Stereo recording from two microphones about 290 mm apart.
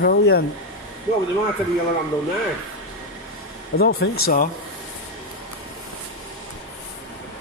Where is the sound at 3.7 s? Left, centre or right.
Left.